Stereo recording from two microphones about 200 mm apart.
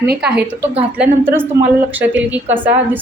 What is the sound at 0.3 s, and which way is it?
A woman's voice, 5° right (ahead or behind).